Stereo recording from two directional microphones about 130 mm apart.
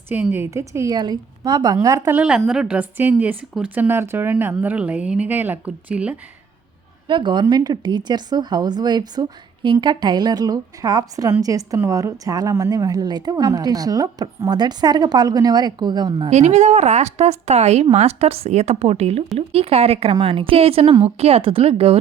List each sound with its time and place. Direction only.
0.1 s speech: 15° right (ahead or behind)
0.5 s a woman's voice: 25° right (ahead or behind)
2.1 s speech: 5° right (ahead or behind)
7.1 s a woman's voice: 35° right (ahead or behind)
16.3 s a woman's voice: 60° right (ahead or behind)